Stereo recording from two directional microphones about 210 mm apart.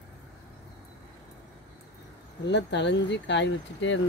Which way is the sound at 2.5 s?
55° left (ahead or behind).